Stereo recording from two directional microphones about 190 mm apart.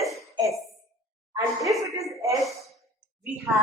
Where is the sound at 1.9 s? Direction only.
15° right (ahead or behind).